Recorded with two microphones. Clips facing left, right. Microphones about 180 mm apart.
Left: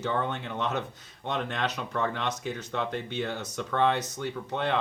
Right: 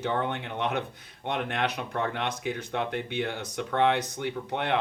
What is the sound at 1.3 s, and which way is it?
Speech, 60° right (ahead or behind).